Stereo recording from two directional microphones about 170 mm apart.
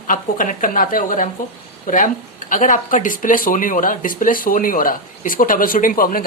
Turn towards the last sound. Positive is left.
turn(degrees=55)  # may be behind; listen again after turning